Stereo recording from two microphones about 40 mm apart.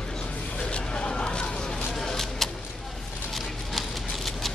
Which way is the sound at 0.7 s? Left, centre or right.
Left.